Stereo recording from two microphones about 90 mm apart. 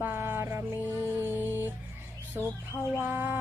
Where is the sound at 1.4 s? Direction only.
30° left (ahead or behind).